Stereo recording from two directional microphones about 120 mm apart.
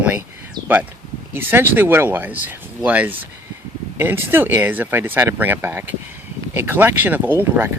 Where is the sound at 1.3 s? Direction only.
20° right (ahead or behind).